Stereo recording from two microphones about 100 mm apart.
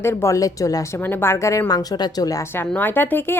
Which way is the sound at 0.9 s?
20° left (ahead or behind).